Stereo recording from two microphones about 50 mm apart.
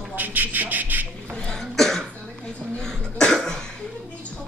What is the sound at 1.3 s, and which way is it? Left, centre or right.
Cough, centre.